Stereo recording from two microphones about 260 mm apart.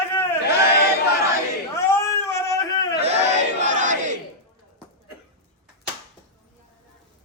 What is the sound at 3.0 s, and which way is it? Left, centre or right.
Battle cry, right.